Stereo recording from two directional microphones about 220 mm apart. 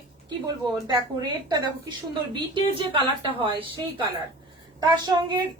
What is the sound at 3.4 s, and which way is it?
Speech, 25° right (ahead or behind).